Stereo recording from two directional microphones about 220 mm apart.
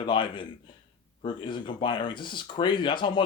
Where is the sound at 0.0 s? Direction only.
20° left (ahead or behind).